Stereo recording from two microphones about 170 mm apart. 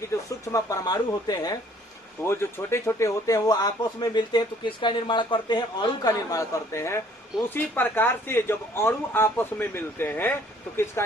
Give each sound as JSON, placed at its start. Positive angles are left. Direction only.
{"t": 0.1, "sound": "a man's voice", "side_deg": 15}